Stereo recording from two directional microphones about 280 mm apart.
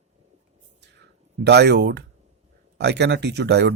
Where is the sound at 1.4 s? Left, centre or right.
Right.